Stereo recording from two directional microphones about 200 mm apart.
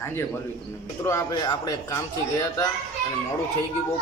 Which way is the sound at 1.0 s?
20° left (ahead or behind).